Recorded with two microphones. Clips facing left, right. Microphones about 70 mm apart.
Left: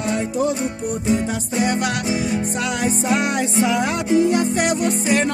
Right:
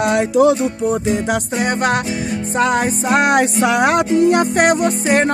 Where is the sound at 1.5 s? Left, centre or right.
Right.